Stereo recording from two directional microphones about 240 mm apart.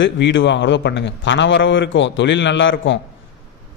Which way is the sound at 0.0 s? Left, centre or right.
Left.